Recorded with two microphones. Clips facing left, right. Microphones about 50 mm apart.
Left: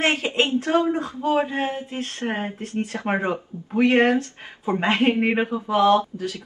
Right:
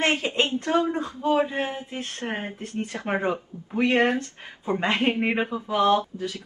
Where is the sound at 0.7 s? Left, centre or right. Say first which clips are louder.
Left 3 dB; left.